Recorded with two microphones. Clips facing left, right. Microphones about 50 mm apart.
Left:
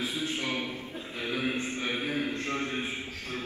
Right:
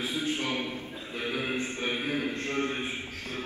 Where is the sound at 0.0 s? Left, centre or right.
Right.